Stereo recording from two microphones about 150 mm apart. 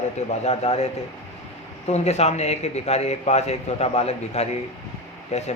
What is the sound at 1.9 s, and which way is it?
A man's voice, 45° left (ahead or behind).